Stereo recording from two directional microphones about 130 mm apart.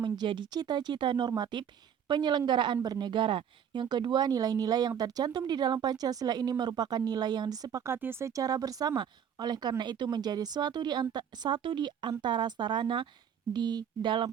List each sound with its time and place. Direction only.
0.0 s speech: 35° right (ahead or behind)